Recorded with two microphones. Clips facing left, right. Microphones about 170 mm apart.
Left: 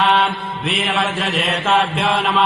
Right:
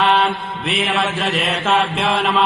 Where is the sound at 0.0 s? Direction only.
Centre (ahead or behind).